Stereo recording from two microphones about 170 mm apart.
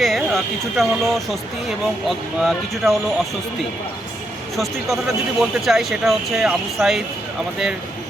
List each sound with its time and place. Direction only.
0.0 s speech: centre (ahead or behind)
4.5 s speech: centre (ahead or behind)